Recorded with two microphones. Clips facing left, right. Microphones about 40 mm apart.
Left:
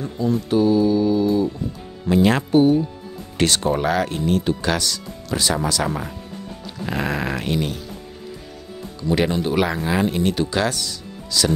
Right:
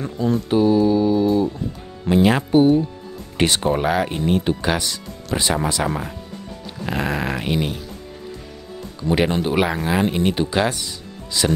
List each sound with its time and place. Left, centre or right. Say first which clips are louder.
0.0 s speech: right 1 dB; right
0.5 s speech: right 1 dB; centre
2.2 s speech: right 1 dB; centre
6.9 s music: right 1 dB; centre
7.5 s speech: right 1 dB; centre
9.0 s speech: right 1 dB; right
9.4 s speech: right 1 dB; centre